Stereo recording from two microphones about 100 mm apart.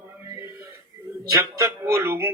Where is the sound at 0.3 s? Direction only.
30° right (ahead or behind).